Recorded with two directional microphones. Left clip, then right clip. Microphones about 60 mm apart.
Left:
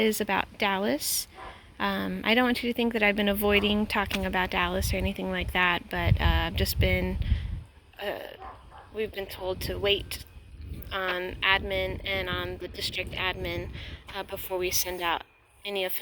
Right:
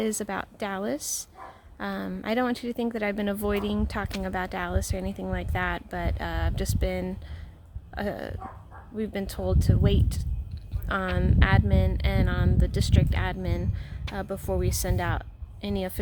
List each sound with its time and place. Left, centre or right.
0.0 s speech: right
4.4 s speech: right
9.0 s speech: right
11.4 s speech: right